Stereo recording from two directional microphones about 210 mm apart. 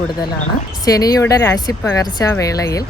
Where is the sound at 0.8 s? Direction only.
15° left (ahead or behind).